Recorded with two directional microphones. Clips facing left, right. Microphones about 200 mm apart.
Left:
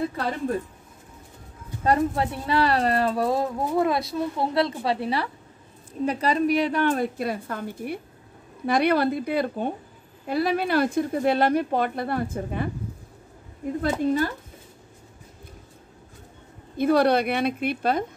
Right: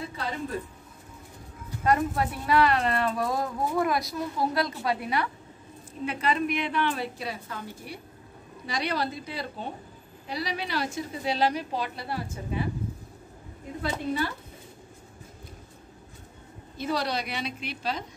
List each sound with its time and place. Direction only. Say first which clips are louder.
1.8 s a woman's voice: left 3 dB; 30° left (ahead or behind); by 12.6 s 55° left (ahead or behind)
13.8 s speech: left 6 dB; 45° left (ahead or behind)
16.7 s a woman's voice: left 10 dB; 55° left (ahead or behind)